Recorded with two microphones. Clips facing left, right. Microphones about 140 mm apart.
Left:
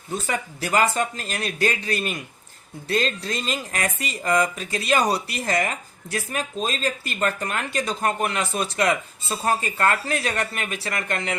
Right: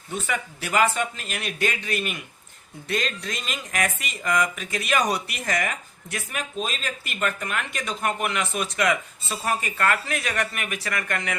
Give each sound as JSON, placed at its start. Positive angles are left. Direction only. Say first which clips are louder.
{"t": 0.1, "sound": "speech", "louder": "left 2 dB", "side_deg": 35}